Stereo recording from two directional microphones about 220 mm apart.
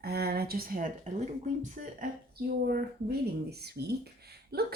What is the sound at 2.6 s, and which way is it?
Speech, 45° right (ahead or behind).